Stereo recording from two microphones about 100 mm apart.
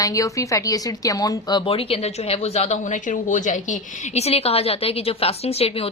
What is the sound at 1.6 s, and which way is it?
Speech, 65° left (ahead or behind).